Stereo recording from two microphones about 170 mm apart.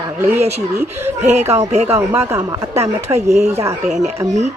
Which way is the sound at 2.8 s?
40° right (ahead or behind).